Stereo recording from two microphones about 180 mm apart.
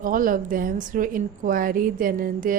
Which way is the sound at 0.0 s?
50° right (ahead or behind).